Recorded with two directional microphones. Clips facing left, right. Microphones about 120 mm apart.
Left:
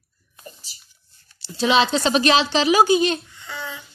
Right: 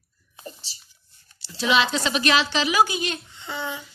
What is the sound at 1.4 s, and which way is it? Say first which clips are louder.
A woman's voice: left 4 dB; 30° left (ahead or behind).